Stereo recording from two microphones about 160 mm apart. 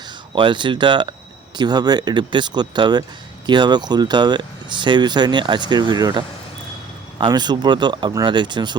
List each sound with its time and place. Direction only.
0.3 s speech: 30° right (ahead or behind)